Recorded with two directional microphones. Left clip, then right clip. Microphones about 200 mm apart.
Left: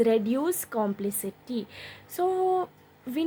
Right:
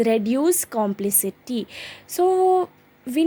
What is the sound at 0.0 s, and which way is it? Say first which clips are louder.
A woman's voice: right 4 dB; 25° right (ahead or behind).